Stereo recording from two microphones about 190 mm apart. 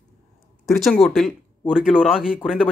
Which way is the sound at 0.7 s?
Centre (ahead or behind).